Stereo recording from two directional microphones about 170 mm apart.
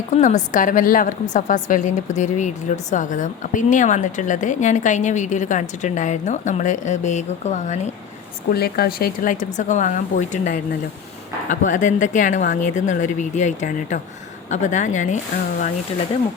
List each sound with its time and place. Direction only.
0.1 s a woman's voice: 45° left (ahead or behind)
8.4 s a woman's voice: 65° left (ahead or behind); by 15.7 s 45° left (ahead or behind)